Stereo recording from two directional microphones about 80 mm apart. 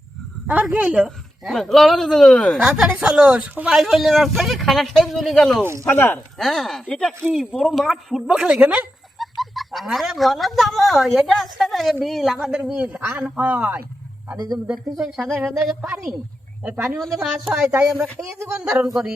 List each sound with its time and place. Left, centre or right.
0.4 s speech: centre
1.0 s speech: centre
2.6 s speech: centre
5.8 s speech: left
6.4 s speech: centre
9.4 s speech: centre
13.0 s speech: right
14.3 s speech: right
14.7 s speech: centre
16.7 s speech: centre
17.2 s speech: centre
18.3 s speech: right